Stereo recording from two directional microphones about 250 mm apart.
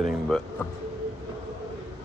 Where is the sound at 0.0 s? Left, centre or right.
Centre.